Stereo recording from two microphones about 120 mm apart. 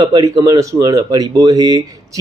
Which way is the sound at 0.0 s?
30° right (ahead or behind).